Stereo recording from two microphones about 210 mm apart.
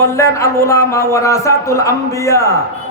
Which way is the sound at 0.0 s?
15° left (ahead or behind).